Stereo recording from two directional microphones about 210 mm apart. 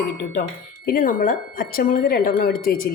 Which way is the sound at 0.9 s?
40° left (ahead or behind).